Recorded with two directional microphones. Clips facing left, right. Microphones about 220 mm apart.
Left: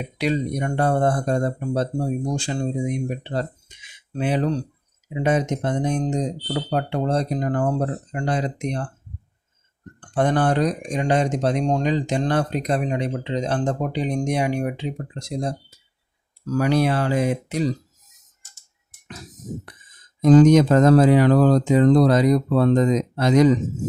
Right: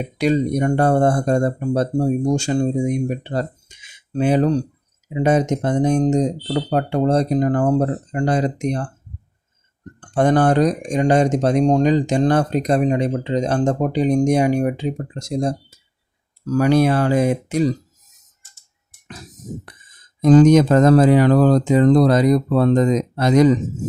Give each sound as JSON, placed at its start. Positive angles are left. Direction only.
{"t": 0.2, "sound": "speech", "side_deg": -45}
{"t": 10.2, "sound": "speech", "side_deg": -45}
{"t": 20.4, "sound": "speech", "side_deg": -50}